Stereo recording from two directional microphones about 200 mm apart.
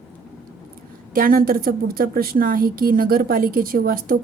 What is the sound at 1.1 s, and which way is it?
A woman's voice, 45° right (ahead or behind).